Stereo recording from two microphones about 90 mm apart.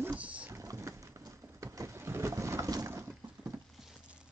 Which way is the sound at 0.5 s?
35° right (ahead or behind).